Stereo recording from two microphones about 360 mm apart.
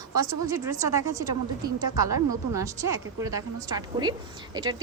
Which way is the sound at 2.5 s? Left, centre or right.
Centre.